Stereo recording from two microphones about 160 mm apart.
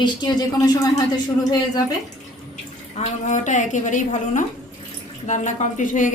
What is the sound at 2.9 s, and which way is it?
A woman's voice, 50° left (ahead or behind).